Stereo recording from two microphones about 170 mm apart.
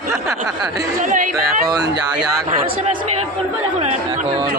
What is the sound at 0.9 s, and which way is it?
Speech, 50° right (ahead or behind).